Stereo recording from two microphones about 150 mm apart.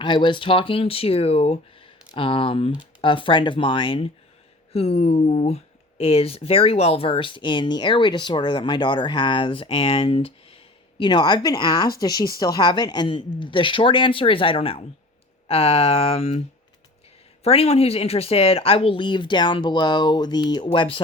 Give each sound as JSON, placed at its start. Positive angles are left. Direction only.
{"t": 0.0, "sound": "speech", "side_deg": 30}
{"t": 17.4, "sound": "speech", "side_deg": 40}